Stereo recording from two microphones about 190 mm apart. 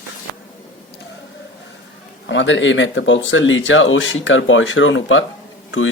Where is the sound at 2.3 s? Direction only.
75° left (ahead or behind).